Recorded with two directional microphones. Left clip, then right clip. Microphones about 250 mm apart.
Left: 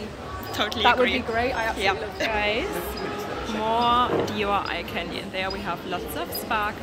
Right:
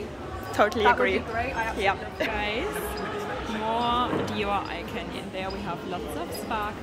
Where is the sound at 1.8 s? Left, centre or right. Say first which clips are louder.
Left 2 dB; centre.